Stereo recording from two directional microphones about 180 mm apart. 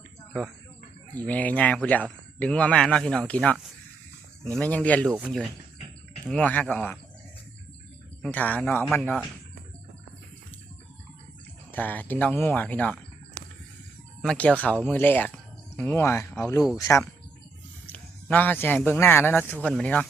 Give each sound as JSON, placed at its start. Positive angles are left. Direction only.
{"t": 1.1, "sound": "speech", "side_deg": 10}
{"t": 6.2, "sound": "speech", "side_deg": 5}
{"t": 8.2, "sound": "speech", "side_deg": 10}
{"t": 11.7, "sound": "speech", "side_deg": 10}
{"t": 14.2, "sound": "speech", "side_deg": 5}